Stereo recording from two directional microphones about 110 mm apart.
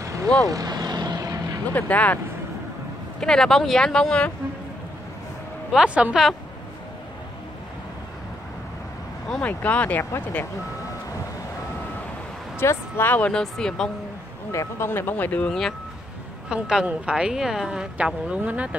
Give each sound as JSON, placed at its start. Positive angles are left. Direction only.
{"t": 0.0, "sound": "vehicle", "side_deg": -30}
{"t": 1.7, "sound": "speech", "side_deg": 15}
{"t": 3.2, "sound": "speech", "side_deg": 5}
{"t": 5.7, "sound": "speech", "side_deg": -10}
{"t": 9.3, "sound": "speech", "side_deg": 15}
{"t": 12.5, "sound": "speech", "side_deg": 20}
{"t": 14.5, "sound": "speech", "side_deg": 25}
{"t": 16.4, "sound": "a woman's voice", "side_deg": -10}